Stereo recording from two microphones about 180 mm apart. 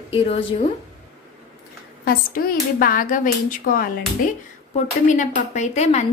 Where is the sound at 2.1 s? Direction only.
55° left (ahead or behind).